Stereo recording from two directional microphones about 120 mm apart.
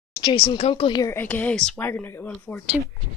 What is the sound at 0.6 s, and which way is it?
Speech, 55° left (ahead or behind).